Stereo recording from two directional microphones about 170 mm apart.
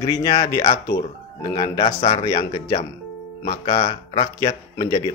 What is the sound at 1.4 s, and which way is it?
Speech, 25° left (ahead or behind).